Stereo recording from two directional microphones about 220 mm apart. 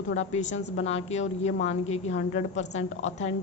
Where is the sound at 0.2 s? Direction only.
30° left (ahead or behind).